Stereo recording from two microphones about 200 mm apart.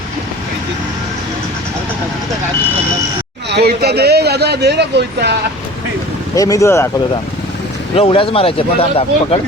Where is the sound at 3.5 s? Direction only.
55° right (ahead or behind).